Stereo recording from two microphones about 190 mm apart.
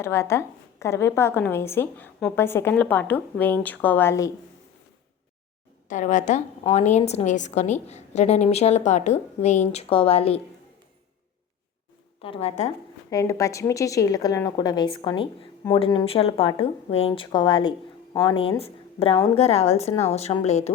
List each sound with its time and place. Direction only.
0.0 s a woman's voice: 15° left (ahead or behind)
5.9 s a woman's voice: 40° left (ahead or behind)
12.2 s a woman's voice: 30° left (ahead or behind)
13.1 s a woman's voice: 15° left (ahead or behind); by 20.7 s 35° left (ahead or behind)